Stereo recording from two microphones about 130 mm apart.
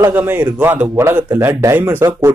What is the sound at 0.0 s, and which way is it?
A man's voice, 15° right (ahead or behind).